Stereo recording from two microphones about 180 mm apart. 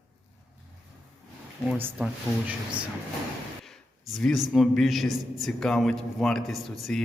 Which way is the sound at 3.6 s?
Centre (ahead or behind).